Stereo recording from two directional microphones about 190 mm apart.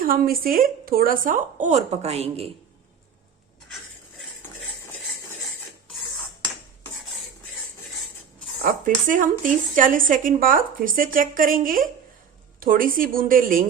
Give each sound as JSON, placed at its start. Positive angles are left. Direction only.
{"t": 0.0, "sound": "speech", "side_deg": -50}
{"t": 8.6, "sound": "speech", "side_deg": -45}